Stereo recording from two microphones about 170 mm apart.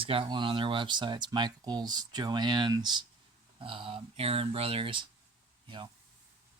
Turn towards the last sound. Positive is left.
turn(degrees=-30)  # may be behind; listen again after turning